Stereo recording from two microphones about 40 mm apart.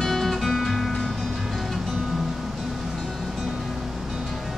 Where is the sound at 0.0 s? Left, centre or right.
Centre.